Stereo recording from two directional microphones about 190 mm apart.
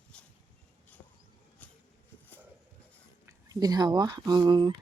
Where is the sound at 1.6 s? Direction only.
10° left (ahead or behind).